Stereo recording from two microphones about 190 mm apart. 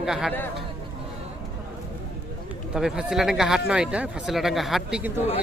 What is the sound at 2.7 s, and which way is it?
Speech, 5° right (ahead or behind).